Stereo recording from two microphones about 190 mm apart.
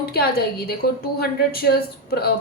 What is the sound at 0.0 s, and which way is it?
Speech, 55° left (ahead or behind).